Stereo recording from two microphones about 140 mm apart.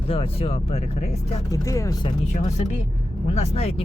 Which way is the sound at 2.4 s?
55° left (ahead or behind).